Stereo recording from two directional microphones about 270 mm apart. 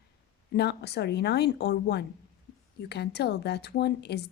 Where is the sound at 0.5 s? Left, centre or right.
Left.